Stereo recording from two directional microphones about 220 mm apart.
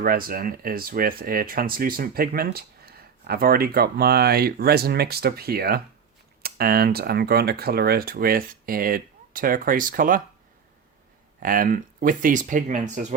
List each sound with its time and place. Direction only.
0.0 s speech: 40° right (ahead or behind)
11.3 s speech: 40° right (ahead or behind)